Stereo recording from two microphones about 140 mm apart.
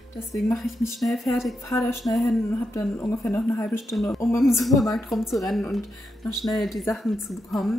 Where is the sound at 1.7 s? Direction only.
20° left (ahead or behind).